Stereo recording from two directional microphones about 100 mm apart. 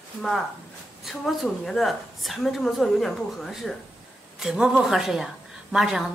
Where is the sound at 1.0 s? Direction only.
Centre (ahead or behind).